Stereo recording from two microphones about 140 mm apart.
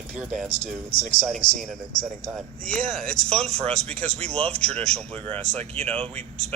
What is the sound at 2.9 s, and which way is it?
Speech, 5° left (ahead or behind).